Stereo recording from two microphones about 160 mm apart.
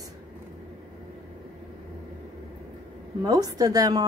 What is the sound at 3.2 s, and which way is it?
Speech, 25° right (ahead or behind).